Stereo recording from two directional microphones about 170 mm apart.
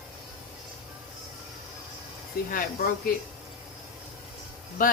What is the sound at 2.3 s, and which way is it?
Speech, 60° left (ahead or behind).